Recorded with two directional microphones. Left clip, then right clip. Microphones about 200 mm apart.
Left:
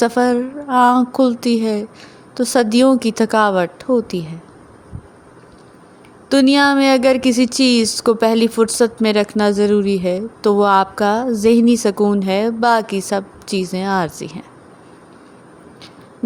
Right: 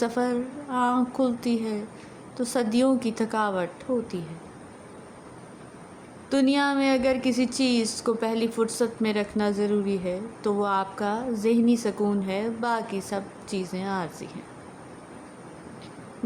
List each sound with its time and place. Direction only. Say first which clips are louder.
0.0 s speech: left 11 dB; 45° left (ahead or behind)
6.2 s speech: left 11 dB; 45° left (ahead or behind)